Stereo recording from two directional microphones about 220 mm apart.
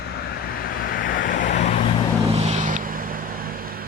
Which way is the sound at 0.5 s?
40° left (ahead or behind).